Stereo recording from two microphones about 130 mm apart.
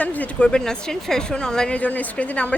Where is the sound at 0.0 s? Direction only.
10° left (ahead or behind).